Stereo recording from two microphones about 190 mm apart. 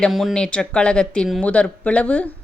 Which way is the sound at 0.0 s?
Centre (ahead or behind).